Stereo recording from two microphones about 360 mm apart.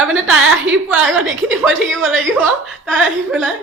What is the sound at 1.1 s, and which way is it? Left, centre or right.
A woman's voice, right.